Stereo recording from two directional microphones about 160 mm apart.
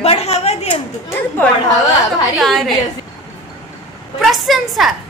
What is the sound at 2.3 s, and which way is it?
Speech, centre (ahead or behind).